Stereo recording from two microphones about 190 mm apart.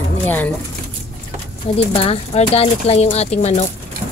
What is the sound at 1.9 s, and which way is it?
Speech, 30° left (ahead or behind).